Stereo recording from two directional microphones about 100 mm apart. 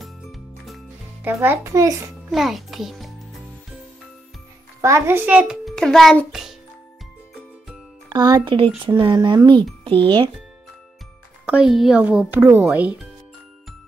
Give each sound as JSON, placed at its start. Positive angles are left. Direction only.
{"t": 0.0, "sound": "music", "side_deg": 0}
{"t": 1.2, "sound": "a child's voice", "side_deg": -20}
{"t": 1.6, "sound": "a child's voice", "side_deg": -35}
{"t": 2.3, "sound": "a child's voice", "side_deg": 0}
{"t": 4.8, "sound": "a child's voice", "side_deg": -25}
{"t": 5.8, "sound": "a child's voice", "side_deg": 5}
{"t": 8.1, "sound": "a child's voice", "side_deg": -45}
{"t": 11.4, "sound": "speech", "side_deg": -10}